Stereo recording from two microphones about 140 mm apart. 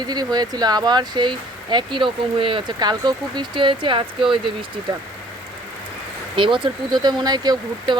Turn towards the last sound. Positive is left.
turn(degrees=-30)  # may be behind; listen again after turning